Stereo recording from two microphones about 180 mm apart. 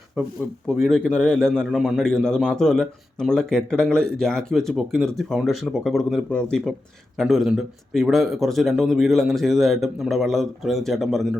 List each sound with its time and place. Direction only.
0.7 s a man's voice: centre (ahead or behind)